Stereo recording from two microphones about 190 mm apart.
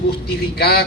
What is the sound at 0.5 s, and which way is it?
Speech, 55° left (ahead or behind).